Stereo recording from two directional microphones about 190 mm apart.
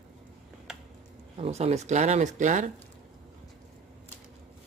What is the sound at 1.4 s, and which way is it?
Speech, 35° right (ahead or behind).